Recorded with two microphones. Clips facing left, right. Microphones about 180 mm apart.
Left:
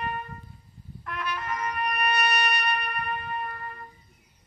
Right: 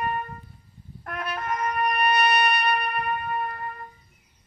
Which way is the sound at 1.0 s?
50° right (ahead or behind).